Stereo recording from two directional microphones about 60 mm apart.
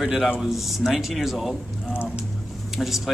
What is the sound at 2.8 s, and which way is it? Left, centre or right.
Speech, centre.